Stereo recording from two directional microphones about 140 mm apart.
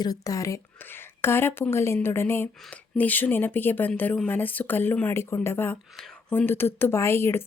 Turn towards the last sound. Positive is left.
turn(degrees=20)  # may be behind; listen again after turning